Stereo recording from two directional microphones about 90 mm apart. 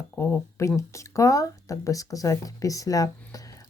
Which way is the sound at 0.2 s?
30° left (ahead or behind).